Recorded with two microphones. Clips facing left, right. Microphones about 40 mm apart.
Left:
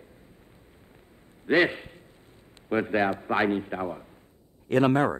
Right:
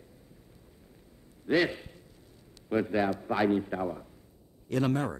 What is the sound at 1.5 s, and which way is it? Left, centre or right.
A man's voice, left.